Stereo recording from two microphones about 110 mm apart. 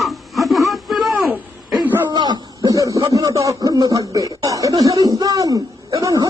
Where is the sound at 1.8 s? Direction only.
20° right (ahead or behind).